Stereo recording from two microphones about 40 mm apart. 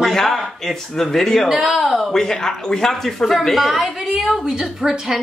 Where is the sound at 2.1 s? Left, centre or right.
Centre.